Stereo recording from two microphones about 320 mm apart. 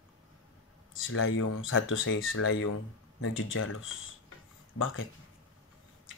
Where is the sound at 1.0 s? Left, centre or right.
Left.